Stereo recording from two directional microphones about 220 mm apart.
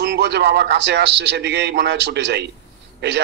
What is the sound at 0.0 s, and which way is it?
A man's voice, 50° right (ahead or behind).